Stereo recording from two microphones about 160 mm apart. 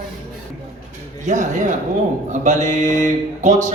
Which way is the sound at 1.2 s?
50° right (ahead or behind).